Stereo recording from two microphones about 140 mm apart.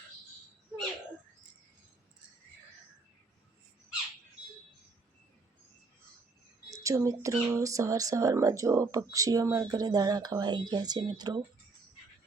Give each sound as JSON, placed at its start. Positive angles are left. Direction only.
{"t": 6.7, "sound": "speech", "side_deg": -20}